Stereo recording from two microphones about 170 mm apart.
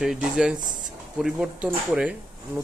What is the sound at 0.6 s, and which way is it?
Speech, 50° right (ahead or behind).